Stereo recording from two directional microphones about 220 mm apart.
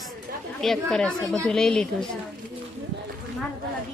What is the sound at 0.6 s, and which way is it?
A woman's voice, centre (ahead or behind).